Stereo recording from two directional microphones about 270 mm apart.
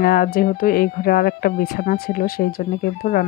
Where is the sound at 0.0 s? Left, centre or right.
Left.